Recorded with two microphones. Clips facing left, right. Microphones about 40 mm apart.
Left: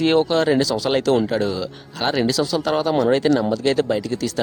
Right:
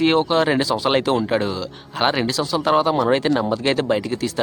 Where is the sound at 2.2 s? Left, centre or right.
Centre.